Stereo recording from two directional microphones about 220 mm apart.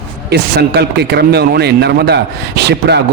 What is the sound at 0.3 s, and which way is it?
Speech, 50° right (ahead or behind).